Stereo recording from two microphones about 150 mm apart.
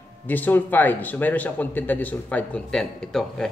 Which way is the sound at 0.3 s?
10° left (ahead or behind).